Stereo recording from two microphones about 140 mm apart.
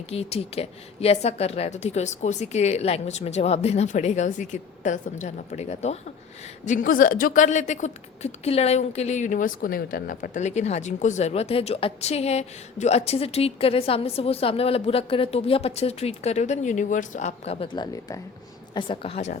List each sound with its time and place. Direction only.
0.1 s a woman's voice: 45° left (ahead or behind)
6.7 s a woman's voice: 80° left; by 19.2 s 40° left (ahead or behind)